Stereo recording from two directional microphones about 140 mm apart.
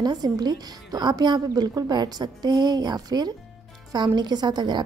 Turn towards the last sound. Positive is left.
turn(degrees=-30)  # may be behind; listen again after turning